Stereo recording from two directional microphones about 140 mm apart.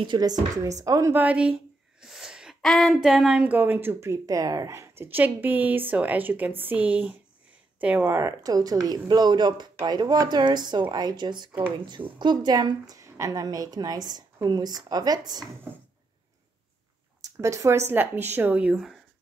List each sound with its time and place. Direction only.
0.0 s a woman's voice: 30° right (ahead or behind)
1.1 s a woman's voice: 10° right (ahead or behind); by 15.4 s 30° right (ahead or behind)
17.2 s speech: 20° right (ahead or behind); by 18.9 s 5° right (ahead or behind)